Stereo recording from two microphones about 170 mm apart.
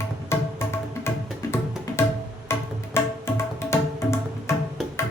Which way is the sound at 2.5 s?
15° left (ahead or behind).